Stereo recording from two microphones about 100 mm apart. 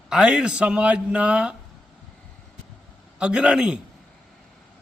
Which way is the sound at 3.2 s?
10° right (ahead or behind).